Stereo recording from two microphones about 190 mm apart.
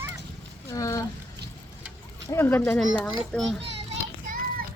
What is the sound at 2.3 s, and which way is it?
A child's voice, 10° left (ahead or behind).